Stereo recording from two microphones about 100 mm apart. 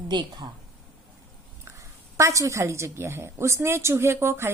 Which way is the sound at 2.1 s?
30° right (ahead or behind).